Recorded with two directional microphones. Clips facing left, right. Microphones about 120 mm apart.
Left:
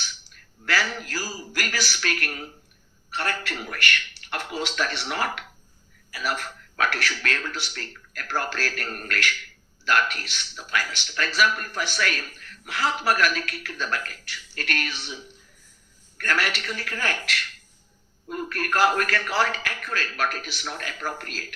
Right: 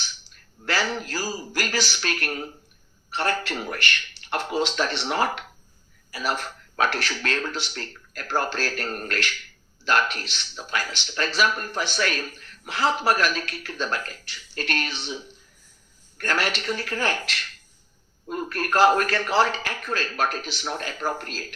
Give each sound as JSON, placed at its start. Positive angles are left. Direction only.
{"t": 0.3, "sound": "speech", "side_deg": -25}